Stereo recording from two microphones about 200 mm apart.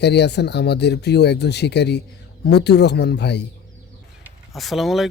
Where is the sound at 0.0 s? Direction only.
55° left (ahead or behind).